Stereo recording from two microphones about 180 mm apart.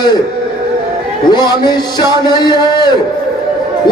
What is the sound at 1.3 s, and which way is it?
Speech, 25° left (ahead or behind).